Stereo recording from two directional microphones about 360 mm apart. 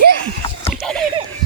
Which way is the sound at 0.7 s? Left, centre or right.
Centre.